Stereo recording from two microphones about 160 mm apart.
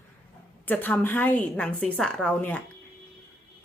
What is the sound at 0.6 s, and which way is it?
A woman's voice, 10° left (ahead or behind).